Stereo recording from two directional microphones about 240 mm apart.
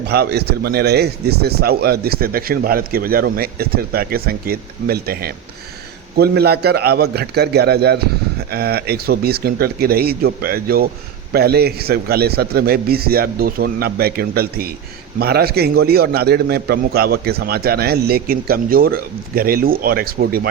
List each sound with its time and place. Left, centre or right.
0.1 s a man's voice: right